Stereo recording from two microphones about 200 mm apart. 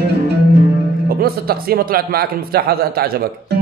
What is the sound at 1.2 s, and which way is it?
Speech, 50° right (ahead or behind).